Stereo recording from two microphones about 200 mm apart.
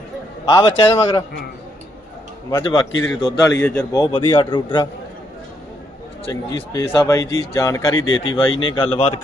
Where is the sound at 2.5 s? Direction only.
20° left (ahead or behind).